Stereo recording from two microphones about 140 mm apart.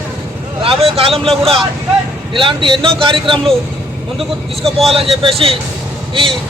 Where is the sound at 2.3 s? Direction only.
35° right (ahead or behind).